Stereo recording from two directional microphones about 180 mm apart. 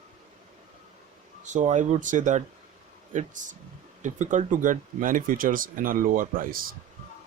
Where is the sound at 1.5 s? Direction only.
40° right (ahead or behind).